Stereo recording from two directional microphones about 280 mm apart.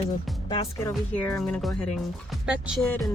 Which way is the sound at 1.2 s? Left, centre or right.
Centre.